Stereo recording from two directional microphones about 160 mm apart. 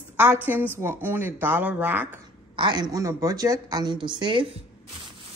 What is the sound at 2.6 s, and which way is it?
A woman's voice, 25° right (ahead or behind).